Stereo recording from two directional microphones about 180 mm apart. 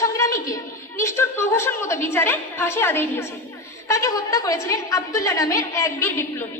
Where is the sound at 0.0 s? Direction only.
15° left (ahead or behind).